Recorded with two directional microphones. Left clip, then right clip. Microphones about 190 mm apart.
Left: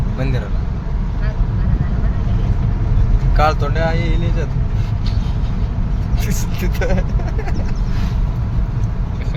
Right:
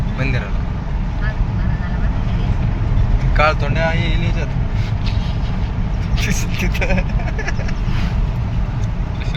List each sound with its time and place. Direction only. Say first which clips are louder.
0.2 s speech: right 2 dB; 20° left (ahead or behind)
3.3 s speech: right 1 dB; 15° left (ahead or behind)
3.6 s speech: right 1 dB; 30° left (ahead or behind)
6.6 s speech: even; 25° left (ahead or behind)